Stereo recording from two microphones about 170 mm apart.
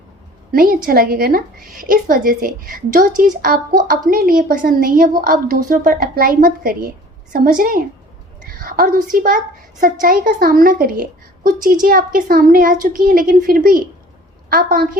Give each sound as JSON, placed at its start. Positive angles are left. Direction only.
{"t": 0.5, "sound": "a woman's voice", "side_deg": -60}